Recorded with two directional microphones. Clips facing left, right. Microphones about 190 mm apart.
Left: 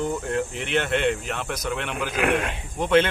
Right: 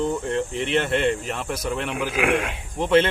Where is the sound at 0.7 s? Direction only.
Centre (ahead or behind).